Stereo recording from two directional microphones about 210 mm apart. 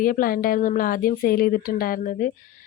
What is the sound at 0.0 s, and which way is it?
A woman's voice, 40° left (ahead or behind).